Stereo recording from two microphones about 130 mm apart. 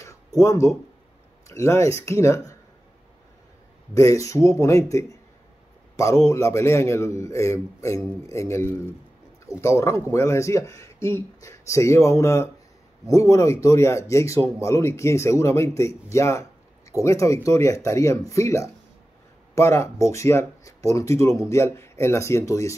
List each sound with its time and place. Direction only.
0.4 s speech: 25° left (ahead or behind)
3.9 s speech: 25° left (ahead or behind)